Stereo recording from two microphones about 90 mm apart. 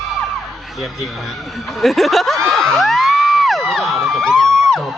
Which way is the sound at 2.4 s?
5° left (ahead or behind).